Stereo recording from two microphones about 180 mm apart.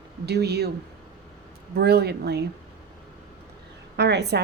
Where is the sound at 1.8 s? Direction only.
65° right (ahead or behind).